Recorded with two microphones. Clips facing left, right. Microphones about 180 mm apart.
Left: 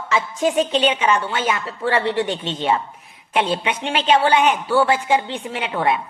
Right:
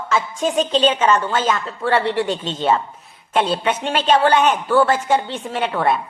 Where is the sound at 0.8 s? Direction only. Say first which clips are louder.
Right 2 dB; 10° left (ahead or behind).